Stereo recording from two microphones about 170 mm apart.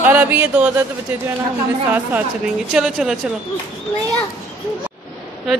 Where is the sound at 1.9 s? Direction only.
10° right (ahead or behind).